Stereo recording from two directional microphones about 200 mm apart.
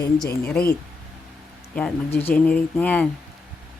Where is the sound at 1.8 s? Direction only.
10° left (ahead or behind).